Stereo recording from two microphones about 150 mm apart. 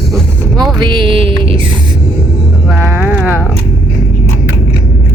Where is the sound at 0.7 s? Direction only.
30° right (ahead or behind).